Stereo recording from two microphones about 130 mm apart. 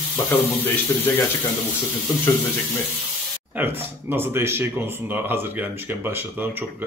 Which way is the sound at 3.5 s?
15° right (ahead or behind).